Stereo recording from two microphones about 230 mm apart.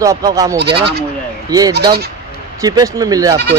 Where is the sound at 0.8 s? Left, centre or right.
Right.